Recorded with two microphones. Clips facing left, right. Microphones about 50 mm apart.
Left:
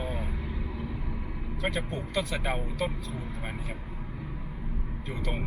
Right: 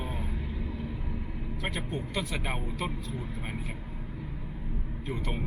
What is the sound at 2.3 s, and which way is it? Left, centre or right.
Speech, centre.